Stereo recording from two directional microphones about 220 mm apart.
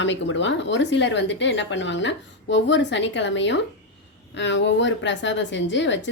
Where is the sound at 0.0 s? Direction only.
55° left (ahead or behind).